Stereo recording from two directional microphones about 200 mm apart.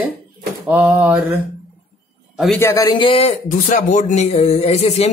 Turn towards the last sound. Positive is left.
turn(degrees=30)  # may be behind; listen again after turning